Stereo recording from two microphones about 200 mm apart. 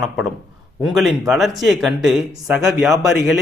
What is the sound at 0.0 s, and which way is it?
Speech, centre (ahead or behind).